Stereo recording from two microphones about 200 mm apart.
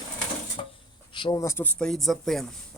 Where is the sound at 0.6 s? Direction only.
25° left (ahead or behind).